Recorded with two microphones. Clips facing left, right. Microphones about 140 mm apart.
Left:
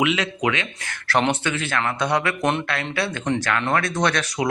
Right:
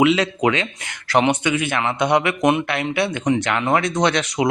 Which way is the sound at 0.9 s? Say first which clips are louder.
Right 3 dB; 15° right (ahead or behind).